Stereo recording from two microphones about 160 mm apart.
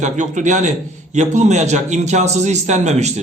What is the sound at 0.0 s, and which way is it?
A man's voice, 50° right (ahead or behind).